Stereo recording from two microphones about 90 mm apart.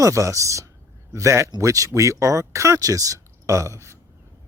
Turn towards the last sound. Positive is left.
turn(degrees=-35)  # may be behind; listen again after turning